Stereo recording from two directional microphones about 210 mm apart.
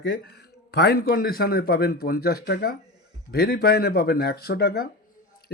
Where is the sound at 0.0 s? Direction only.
45° left (ahead or behind).